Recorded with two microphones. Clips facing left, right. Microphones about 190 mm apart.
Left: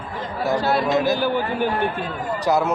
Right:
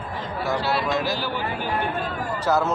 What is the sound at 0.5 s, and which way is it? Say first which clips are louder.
Speech: left 4 dB; 45° left (ahead or behind).